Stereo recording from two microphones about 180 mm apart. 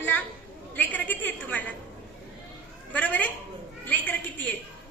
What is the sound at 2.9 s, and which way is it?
A woman's voice, 10° left (ahead or behind).